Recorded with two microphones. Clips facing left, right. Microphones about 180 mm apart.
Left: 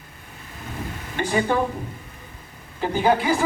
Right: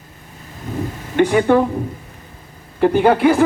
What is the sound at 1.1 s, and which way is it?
Speech, 65° right (ahead or behind).